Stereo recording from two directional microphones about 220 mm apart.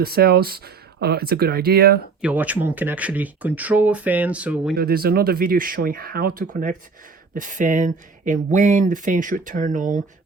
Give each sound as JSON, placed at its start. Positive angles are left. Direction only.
{"t": 0.0, "sound": "speech", "side_deg": -45}
{"t": 2.2, "sound": "speech", "side_deg": -5}
{"t": 4.8, "sound": "speech", "side_deg": -45}